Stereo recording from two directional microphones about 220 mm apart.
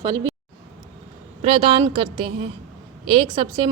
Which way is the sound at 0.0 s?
20° right (ahead or behind).